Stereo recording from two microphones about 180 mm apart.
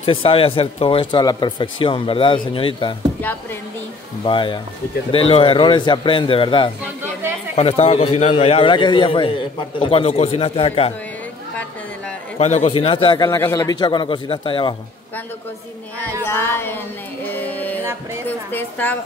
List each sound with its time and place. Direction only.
0.0 s speech: 30° left (ahead or behind)
4.2 s a man's voice: 25° left (ahead or behind)
12.4 s speech: 35° left (ahead or behind)
16.3 s a woman's voice: 15° left (ahead or behind)
17.3 s music: 10° left (ahead or behind)
18.2 s a woman's voice: 10° left (ahead or behind)